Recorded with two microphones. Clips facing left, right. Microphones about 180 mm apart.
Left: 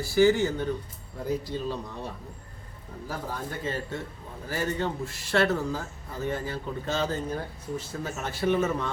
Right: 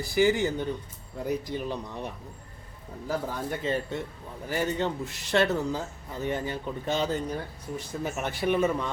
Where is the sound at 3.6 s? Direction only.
20° right (ahead or behind).